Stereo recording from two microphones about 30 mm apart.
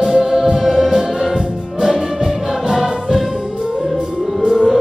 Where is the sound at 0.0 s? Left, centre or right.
Centre.